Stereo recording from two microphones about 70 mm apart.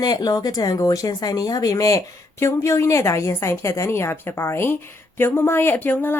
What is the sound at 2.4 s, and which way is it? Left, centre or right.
A woman's voice, left.